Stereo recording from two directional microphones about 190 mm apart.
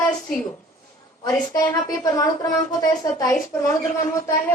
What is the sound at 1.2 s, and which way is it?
A woman's voice, 20° left (ahead or behind).